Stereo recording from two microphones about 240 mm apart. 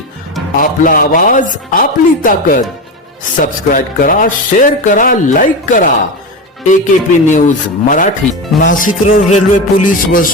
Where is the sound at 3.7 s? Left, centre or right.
Left.